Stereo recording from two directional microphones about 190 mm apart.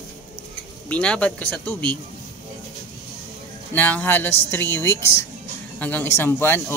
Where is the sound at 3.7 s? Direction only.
10° left (ahead or behind).